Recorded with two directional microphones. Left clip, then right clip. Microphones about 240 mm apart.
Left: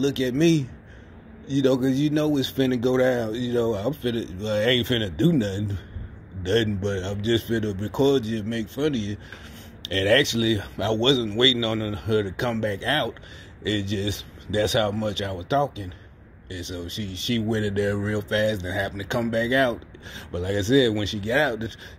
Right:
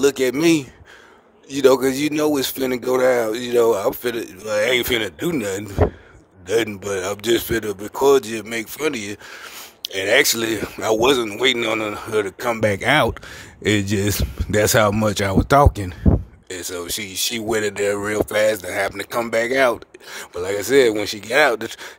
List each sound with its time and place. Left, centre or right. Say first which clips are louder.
0.0 s speech: right 5 dB; right